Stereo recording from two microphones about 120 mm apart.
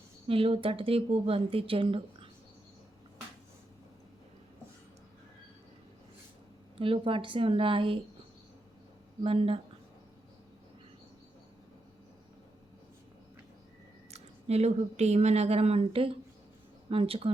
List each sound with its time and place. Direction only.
0.3 s a woman's voice: 50° right (ahead or behind)
6.7 s a woman's voice: 50° right (ahead or behind)
9.2 s a woman's voice: 55° right (ahead or behind)
14.1 s a woman's voice: 60° right (ahead or behind)